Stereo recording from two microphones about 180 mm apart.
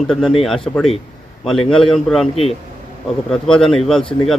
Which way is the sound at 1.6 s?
30° left (ahead or behind).